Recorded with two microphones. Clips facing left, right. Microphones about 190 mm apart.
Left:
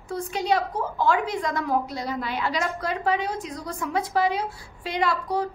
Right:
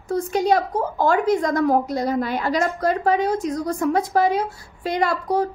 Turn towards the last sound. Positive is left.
turn(degrees=-45)  # may be behind; listen again after turning